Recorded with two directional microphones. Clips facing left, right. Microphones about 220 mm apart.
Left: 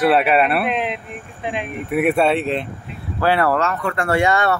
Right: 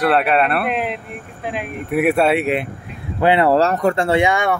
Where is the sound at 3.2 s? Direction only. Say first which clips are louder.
Right 3 dB; 20° right (ahead or behind).